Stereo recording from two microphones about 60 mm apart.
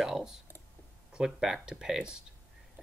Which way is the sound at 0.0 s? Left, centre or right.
Centre.